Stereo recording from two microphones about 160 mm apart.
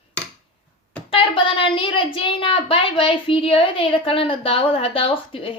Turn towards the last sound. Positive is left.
turn(degrees=35)  # may be behind; listen again after turning